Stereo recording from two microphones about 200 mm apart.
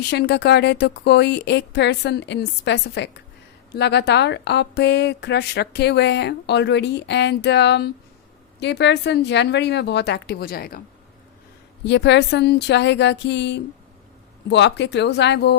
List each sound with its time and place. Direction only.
0.1 s speech: 55° left (ahead or behind)
11.9 s speech: 60° left (ahead or behind)